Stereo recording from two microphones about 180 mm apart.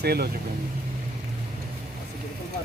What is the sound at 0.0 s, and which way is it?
Speech, 60° right (ahead or behind).